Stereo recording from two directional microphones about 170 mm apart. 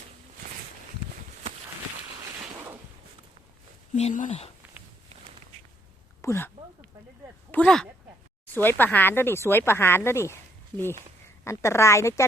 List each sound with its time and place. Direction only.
3.9 s speech: 45° left (ahead or behind)
4.6 s a sound: 10° right (ahead or behind)
6.2 s speech: 15° left (ahead or behind)
7.5 s speech: 5° left (ahead or behind)